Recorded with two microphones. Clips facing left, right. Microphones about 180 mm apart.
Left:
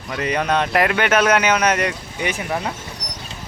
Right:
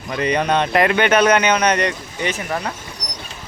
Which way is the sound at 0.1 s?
Centre (ahead or behind).